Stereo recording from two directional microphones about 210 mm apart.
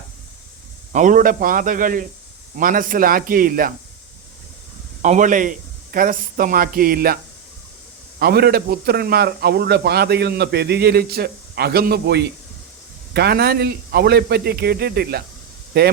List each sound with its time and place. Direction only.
0.9 s a man's voice: 40° right (ahead or behind)
5.0 s a man's voice: 35° right (ahead or behind)
8.2 s a man's voice: 50° right (ahead or behind)